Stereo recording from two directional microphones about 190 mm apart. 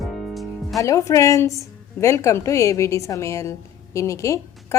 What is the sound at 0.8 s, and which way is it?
A woman's voice, 15° left (ahead or behind).